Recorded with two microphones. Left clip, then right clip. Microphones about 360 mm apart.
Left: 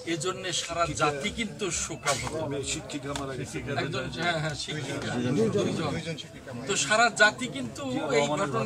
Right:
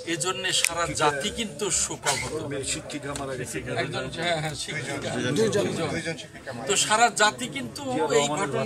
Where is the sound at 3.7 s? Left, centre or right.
Centre.